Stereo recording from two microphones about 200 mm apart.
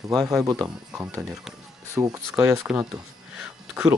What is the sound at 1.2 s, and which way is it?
Speech, centre (ahead or behind).